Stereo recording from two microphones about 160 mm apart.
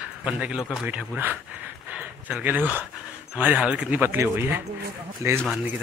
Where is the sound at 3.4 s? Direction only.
10° right (ahead or behind).